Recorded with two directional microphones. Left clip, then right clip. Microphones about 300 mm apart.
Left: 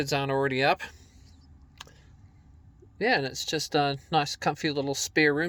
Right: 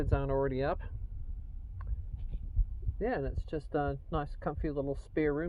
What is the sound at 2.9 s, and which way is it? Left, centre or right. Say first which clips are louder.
Speech: left 9 dB; left.